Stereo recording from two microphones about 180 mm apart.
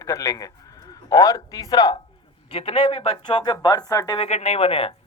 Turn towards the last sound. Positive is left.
turn(degrees=30)  # may be behind; listen again after turning